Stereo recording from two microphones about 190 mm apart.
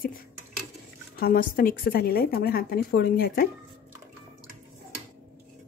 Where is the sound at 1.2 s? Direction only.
50° left (ahead or behind).